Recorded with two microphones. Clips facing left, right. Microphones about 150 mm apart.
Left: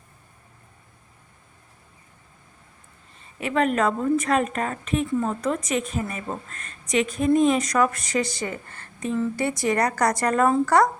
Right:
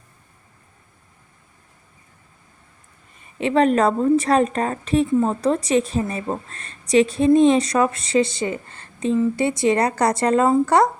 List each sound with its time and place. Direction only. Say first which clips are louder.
3.3 s a woman's voice: right 5 dB; 30° right (ahead or behind)